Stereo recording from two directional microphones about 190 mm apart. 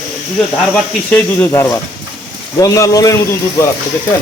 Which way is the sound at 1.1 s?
10° left (ahead or behind).